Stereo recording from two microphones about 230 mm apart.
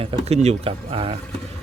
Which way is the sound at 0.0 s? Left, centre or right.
Right.